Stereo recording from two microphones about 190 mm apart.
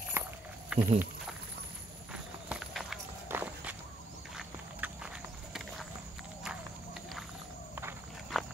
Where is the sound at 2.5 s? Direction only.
Centre (ahead or behind).